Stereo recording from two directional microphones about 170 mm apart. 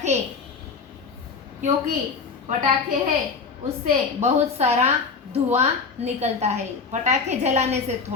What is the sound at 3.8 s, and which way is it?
A woman's voice, 40° right (ahead or behind).